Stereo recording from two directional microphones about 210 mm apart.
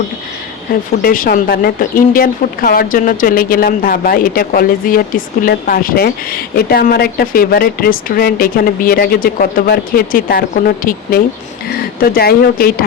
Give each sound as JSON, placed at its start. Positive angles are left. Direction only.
{"t": 1.0, "sound": "speech", "side_deg": 40}